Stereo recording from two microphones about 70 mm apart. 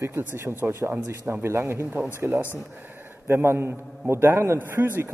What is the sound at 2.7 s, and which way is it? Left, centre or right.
A man's voice, right.